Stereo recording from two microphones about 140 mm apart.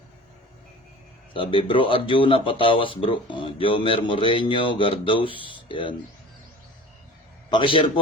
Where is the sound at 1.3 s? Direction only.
40° left (ahead or behind).